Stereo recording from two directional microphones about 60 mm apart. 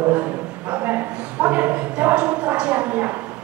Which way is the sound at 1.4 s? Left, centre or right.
Right.